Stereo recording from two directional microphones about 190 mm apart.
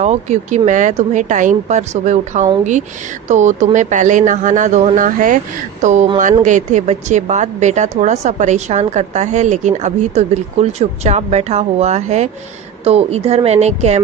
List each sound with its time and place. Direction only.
0.0 s a woman's voice: 35° right (ahead or behind)